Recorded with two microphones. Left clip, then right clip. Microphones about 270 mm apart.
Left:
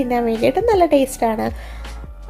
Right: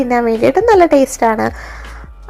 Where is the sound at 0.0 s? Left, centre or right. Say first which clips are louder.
Right 5 dB; centre.